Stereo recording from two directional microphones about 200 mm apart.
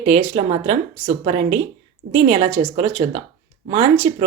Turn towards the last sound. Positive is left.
turn(degrees=-30)  # may be behind; listen again after turning